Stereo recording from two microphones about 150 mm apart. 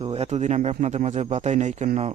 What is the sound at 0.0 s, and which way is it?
Speech, 45° right (ahead or behind).